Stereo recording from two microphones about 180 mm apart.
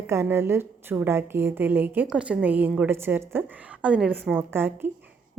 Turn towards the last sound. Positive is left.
turn(degrees=-10)  # may be behind; listen again after turning